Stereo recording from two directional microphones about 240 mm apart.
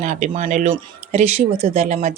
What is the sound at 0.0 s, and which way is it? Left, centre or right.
Speech, right.